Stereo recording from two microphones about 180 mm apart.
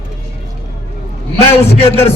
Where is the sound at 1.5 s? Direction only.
35° left (ahead or behind).